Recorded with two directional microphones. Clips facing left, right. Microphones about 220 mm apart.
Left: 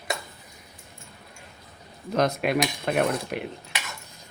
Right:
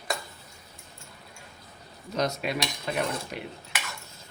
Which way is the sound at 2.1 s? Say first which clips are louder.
Left 5 dB; 55° left (ahead or behind).